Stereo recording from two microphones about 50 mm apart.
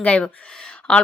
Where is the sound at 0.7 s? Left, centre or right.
Centre.